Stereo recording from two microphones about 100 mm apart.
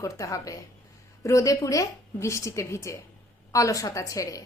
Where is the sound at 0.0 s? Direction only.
35° left (ahead or behind).